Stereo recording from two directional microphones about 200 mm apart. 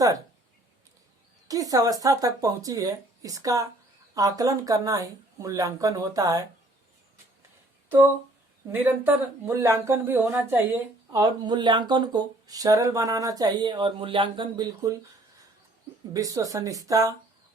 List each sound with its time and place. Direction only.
1.5 s speech: 15° right (ahead or behind)
7.9 s speech: 10° right (ahead or behind)
16.1 s speech: 15° right (ahead or behind)